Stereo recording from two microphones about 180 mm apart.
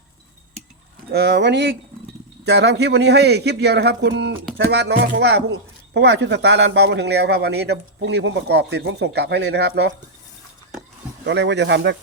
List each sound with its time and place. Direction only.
1.1 s speech: 65° right (ahead or behind)
11.3 s speech: 75° right (ahead or behind)